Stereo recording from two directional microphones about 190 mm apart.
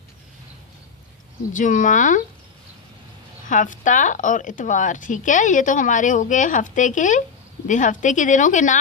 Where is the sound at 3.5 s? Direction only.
40° left (ahead or behind).